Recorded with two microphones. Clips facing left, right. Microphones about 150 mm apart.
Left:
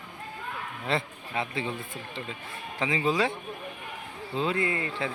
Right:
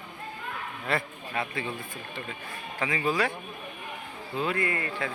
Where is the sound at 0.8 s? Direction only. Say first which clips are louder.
Left 1 dB; 20° left (ahead or behind).